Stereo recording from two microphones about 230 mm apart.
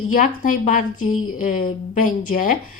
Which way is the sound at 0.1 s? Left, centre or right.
Left.